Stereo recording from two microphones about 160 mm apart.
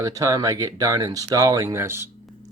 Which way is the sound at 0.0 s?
20° right (ahead or behind).